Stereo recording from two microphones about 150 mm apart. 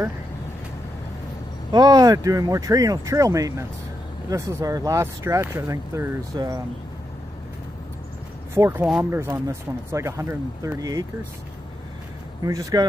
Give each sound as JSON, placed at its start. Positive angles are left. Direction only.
{"t": 1.7, "sound": "speech", "side_deg": -25}
{"t": 8.5, "sound": "speech", "side_deg": -15}
{"t": 12.4, "sound": "speech", "side_deg": -25}